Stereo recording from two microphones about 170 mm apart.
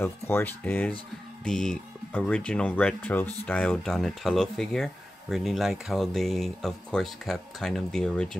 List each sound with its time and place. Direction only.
0.0 s speech: 10° left (ahead or behind)